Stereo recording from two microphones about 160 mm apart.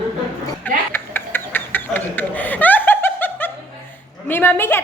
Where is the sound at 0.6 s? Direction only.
15° left (ahead or behind).